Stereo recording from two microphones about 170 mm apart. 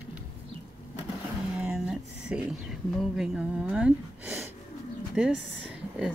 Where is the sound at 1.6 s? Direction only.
5° right (ahead or behind).